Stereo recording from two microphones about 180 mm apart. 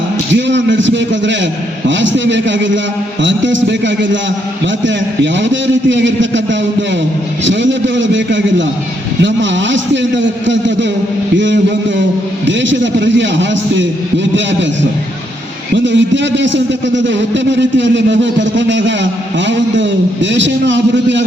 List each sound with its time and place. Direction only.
0.3 s a man's voice: 85° right
15.7 s a man's voice: 90° right